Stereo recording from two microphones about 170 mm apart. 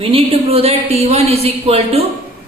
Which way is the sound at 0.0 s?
30° right (ahead or behind).